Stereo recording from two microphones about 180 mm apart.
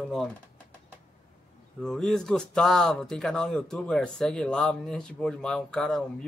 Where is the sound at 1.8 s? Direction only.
5° left (ahead or behind).